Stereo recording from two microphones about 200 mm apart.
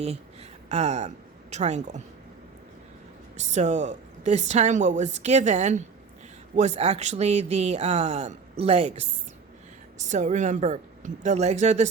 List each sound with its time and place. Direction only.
0.7 s speech: 35° right (ahead or behind)
3.3 s speech: 35° right (ahead or behind)
10.1 s speech: 35° right (ahead or behind)